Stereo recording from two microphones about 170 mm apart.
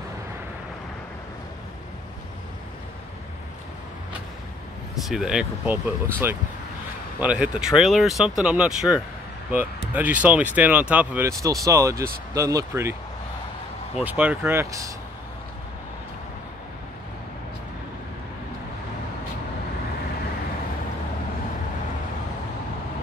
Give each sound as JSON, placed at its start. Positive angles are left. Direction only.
{"t": 5.0, "sound": "speech", "side_deg": -5}
{"t": 13.9, "sound": "speech", "side_deg": -10}